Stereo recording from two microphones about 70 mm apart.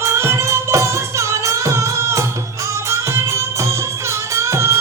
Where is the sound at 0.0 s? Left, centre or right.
Right.